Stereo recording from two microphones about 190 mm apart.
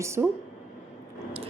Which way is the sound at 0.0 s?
15° right (ahead or behind).